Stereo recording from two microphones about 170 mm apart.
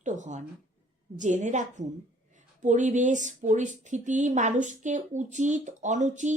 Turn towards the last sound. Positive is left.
turn(degrees=-45)  # may be behind; listen again after turning